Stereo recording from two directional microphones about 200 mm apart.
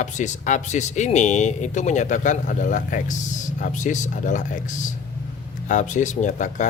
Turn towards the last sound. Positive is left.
turn(degrees=35)  # may be behind; listen again after turning